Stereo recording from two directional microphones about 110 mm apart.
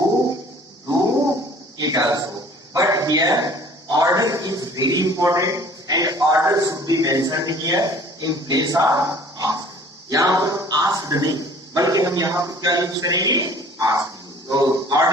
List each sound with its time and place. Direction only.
1.8 s a man's voice: 35° right (ahead or behind)